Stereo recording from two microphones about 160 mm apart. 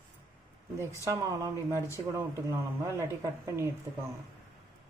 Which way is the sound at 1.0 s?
20° right (ahead or behind).